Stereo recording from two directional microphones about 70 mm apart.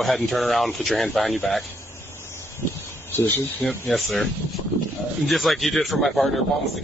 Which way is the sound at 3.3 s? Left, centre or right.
Left.